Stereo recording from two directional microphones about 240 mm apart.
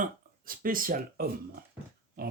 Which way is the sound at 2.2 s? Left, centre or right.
Right.